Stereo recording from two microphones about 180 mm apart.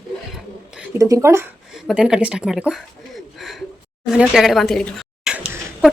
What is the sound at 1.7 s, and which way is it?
A woman's voice, 5° right (ahead or behind).